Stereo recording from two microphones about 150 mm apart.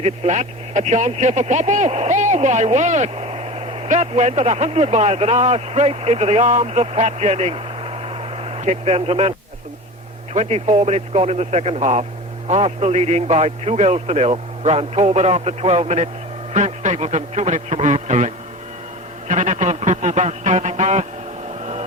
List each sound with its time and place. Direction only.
0.0 s speech: 50° right (ahead or behind)
10.3 s a man's voice: 45° right (ahead or behind)
19.3 s a man's voice: 50° right (ahead or behind)
21.6 s a sound: 45° right (ahead or behind)